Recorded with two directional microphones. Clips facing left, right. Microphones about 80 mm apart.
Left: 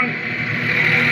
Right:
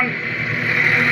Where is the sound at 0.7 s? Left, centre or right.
Centre.